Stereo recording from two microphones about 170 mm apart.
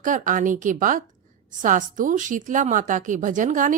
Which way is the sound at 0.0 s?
50° right (ahead or behind).